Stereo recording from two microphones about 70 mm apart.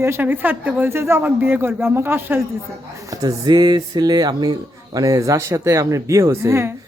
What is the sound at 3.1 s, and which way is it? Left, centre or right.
Speech, right.